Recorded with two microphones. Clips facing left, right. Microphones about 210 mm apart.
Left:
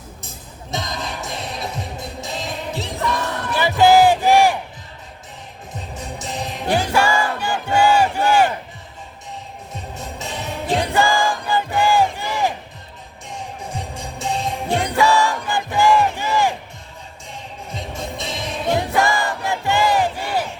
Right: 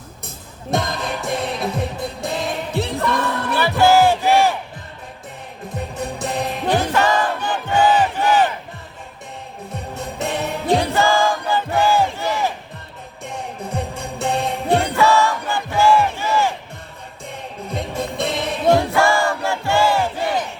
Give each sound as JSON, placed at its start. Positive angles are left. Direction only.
{"t": 0.7, "sound": "music", "side_deg": -55}
{"t": 3.6, "sound": "battle cry", "side_deg": 15}
{"t": 6.0, "sound": "music", "side_deg": -60}
{"t": 6.7, "sound": "battle cry", "side_deg": 10}
{"t": 10.2, "sound": "music", "side_deg": -60}
{"t": 10.9, "sound": "battle cry", "side_deg": 15}
{"t": 13.2, "sound": "music", "side_deg": -60}
{"t": 14.8, "sound": "battle cry", "side_deg": 15}
{"t": 17.2, "sound": "music", "side_deg": -60}
{"t": 18.8, "sound": "battle cry", "side_deg": 15}